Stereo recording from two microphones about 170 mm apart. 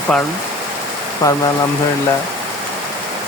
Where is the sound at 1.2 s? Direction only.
20° left (ahead or behind).